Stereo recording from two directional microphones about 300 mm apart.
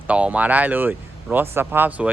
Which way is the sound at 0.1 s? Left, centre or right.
Centre.